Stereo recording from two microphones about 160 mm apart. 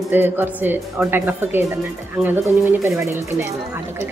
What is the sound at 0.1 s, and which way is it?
Speech, 15° right (ahead or behind).